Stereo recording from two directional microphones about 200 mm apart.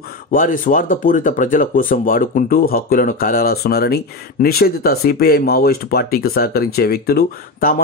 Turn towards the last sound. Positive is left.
turn(degrees=50)  # may be behind; listen again after turning